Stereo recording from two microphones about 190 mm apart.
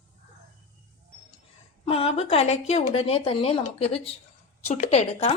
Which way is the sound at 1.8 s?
30° left (ahead or behind).